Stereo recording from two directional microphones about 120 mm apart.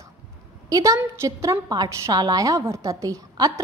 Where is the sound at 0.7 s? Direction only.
30° right (ahead or behind).